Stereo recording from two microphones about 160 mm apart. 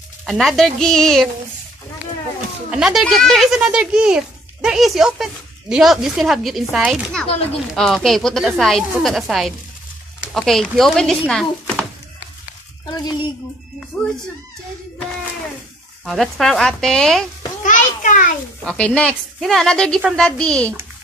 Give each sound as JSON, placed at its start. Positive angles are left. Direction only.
{"t": 0.3, "sound": "speech", "side_deg": 0}
{"t": 2.7, "sound": "speech", "side_deg": 0}
{"t": 12.9, "sound": "a sound", "side_deg": 25}
{"t": 13.9, "sound": "speech", "side_deg": 10}
{"t": 16.1, "sound": "speech", "side_deg": 0}
{"t": 17.6, "sound": "a sound", "side_deg": 55}
{"t": 18.7, "sound": "speech", "side_deg": 5}